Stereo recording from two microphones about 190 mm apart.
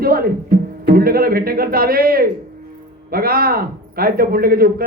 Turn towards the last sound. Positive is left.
turn(degrees=-50)  # may be behind; listen again after turning